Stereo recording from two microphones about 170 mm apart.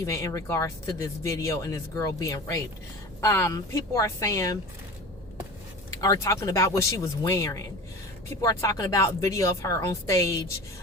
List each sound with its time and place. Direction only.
0.0 s speech: 20° left (ahead or behind)
5.9 s speech: 20° left (ahead or behind)